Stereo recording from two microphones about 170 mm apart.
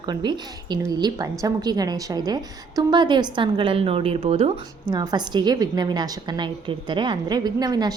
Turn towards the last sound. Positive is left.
turn(degrees=-20)  # may be behind; listen again after turning